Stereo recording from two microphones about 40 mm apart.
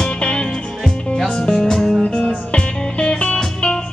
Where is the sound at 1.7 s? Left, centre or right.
Centre.